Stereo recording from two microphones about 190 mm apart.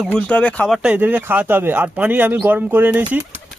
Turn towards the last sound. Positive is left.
turn(degrees=-10)  # may be behind; listen again after turning